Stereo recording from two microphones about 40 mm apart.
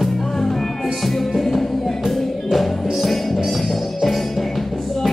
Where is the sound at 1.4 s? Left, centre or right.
Centre.